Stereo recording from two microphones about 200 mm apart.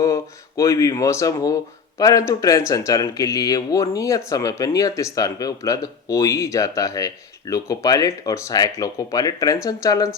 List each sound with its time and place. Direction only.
0.0 s speech: 15° left (ahead or behind)